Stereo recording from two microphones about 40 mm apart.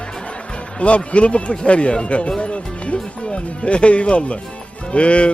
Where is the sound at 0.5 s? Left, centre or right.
Left.